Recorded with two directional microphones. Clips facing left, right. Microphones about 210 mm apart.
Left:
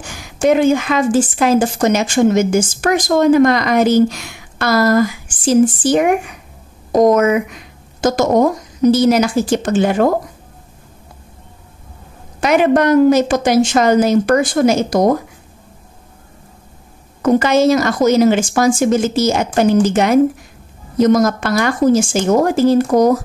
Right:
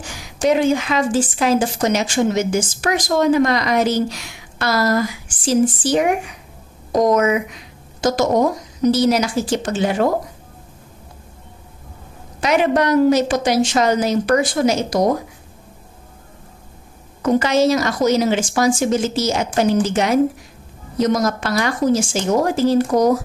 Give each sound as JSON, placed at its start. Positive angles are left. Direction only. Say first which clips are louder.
{"t": 0.0, "sound": "a woman's voice", "louder": "left 4 dB", "side_deg": 50}
{"t": 12.4, "sound": "a woman's voice", "louder": "left 4 dB", "side_deg": 50}
{"t": 17.2, "sound": "a woman's voice", "louder": "left 3 dB", "side_deg": 50}